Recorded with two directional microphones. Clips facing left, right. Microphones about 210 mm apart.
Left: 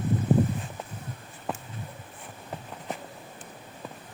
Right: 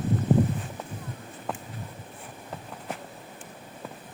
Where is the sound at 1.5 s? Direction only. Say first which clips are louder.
Left 1 dB; centre (ahead or behind).